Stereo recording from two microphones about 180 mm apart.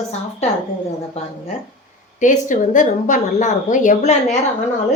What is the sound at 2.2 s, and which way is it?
A woman's voice, 45° left (ahead or behind).